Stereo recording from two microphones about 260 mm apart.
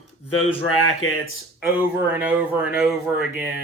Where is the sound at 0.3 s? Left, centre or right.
Left.